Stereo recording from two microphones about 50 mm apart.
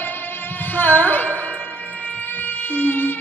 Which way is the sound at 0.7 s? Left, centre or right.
Left.